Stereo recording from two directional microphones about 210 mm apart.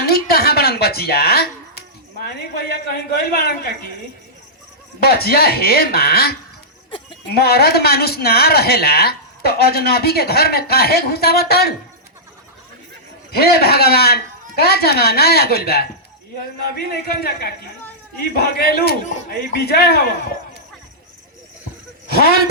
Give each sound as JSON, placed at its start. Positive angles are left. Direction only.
{"t": 0.0, "sound": "a sound", "side_deg": 45}
{"t": 4.9, "sound": "speech", "side_deg": 45}
{"t": 7.3, "sound": "speech", "side_deg": 50}
{"t": 13.3, "sound": "speech", "side_deg": 50}
{"t": 22.1, "sound": "speech", "side_deg": 45}